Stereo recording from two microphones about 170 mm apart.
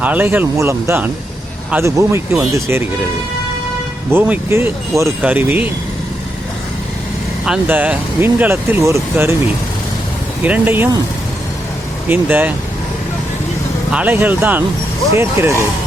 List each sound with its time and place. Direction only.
0.0 s speech: 10° right (ahead or behind)
4.1 s speech: 15° right (ahead or behind)
7.4 s speech: 5° right (ahead or behind)
10.4 s speech: 10° right (ahead or behind)
12.0 s speech: 10° right (ahead or behind)
13.9 s speech: 10° right (ahead or behind)